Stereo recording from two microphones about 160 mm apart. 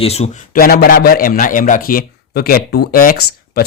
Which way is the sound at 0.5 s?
70° left (ahead or behind).